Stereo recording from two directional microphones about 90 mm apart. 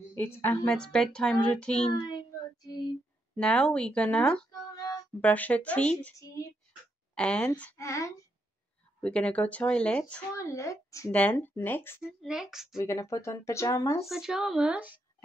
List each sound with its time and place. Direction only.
0.1 s a woman's voice: 20° left (ahead or behind)
0.7 s speech: 10° left (ahead or behind)
1.9 s a child's voice: 45° left (ahead or behind)
3.3 s speech: 10° left (ahead or behind)
4.5 s a sound: 45° left (ahead or behind)
5.2 s speech: 15° left (ahead or behind)
7.2 s speech: 10° left (ahead or behind)
7.7 s speech: 35° left (ahead or behind)
9.0 s speech: 15° left (ahead or behind)
10.3 s speech: 35° left (ahead or behind)
11.1 s speech: 15° left (ahead or behind)
12.3 s speech: 5° right (ahead or behind)
12.7 s speech: 35° left (ahead or behind)
14.0 s speech: 5° right (ahead or behind)